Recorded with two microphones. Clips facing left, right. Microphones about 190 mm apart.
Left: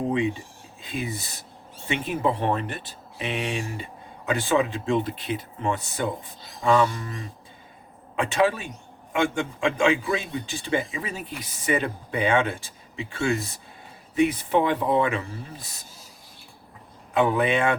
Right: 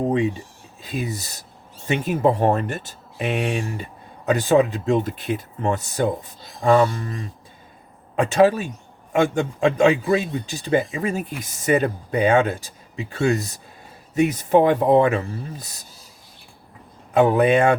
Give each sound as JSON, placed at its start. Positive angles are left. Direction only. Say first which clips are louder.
{"t": 0.9, "sound": "speech", "louder": "right 3 dB", "side_deg": -40}
{"t": 17.2, "sound": "speech", "louder": "right 6 dB", "side_deg": -45}